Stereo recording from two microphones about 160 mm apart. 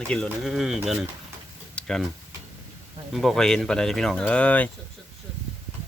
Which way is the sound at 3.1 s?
Centre (ahead or behind).